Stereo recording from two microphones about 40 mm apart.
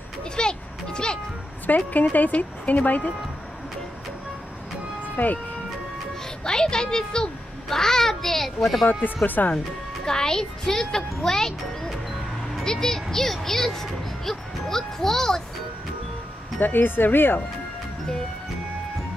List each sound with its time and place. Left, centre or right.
0.4 s a child's voice: left
1.7 s speech: left
5.0 s music: left
6.4 s a child's voice: centre
8.8 s speech: left
10.0 s speech: centre
16.5 s speech: left